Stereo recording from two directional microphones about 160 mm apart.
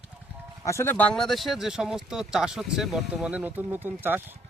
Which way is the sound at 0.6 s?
15° left (ahead or behind).